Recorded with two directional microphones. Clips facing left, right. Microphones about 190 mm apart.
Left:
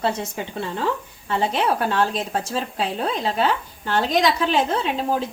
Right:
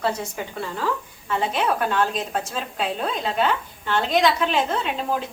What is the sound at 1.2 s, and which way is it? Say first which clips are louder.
A woman's voice: left 2 dB; 30° left (ahead or behind).